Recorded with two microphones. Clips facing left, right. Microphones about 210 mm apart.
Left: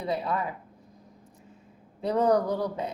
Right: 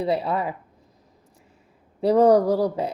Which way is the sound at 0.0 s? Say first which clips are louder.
Right 6 dB; 35° right (ahead or behind).